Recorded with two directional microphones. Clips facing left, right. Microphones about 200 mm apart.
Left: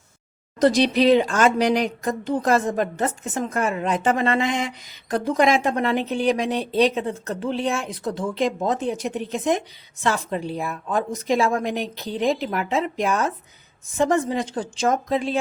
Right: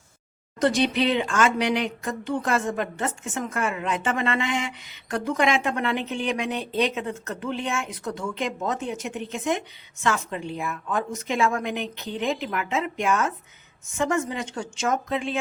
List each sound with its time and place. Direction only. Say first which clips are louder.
0.6 s speech: left 5 dB; 35° left (ahead or behind)